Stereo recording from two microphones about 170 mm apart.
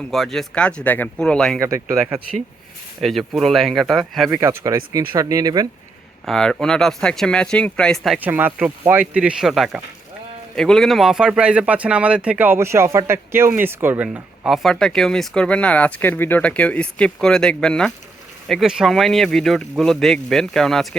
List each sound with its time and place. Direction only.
0.1 s speech: centre (ahead or behind)
1.6 s speech: 15° right (ahead or behind)
3.0 s speech: centre (ahead or behind)
4.3 s speech: 15° right (ahead or behind)
6.2 s speech: 5° left (ahead or behind)